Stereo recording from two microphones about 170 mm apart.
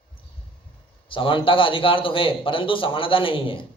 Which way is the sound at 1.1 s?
30° left (ahead or behind).